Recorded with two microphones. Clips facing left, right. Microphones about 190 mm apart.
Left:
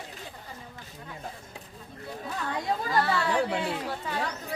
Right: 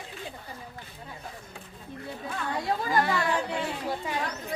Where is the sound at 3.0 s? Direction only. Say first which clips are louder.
Left 3 dB; 15° right (ahead or behind).